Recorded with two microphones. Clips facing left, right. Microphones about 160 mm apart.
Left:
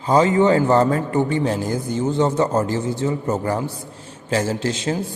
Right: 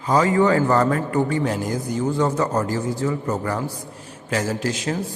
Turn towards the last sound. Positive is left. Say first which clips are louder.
# left 2 dB
turn(degrees=25)  # may be behind; listen again after turning